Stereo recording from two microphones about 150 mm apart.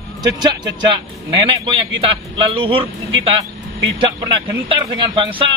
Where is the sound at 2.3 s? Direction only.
35° right (ahead or behind).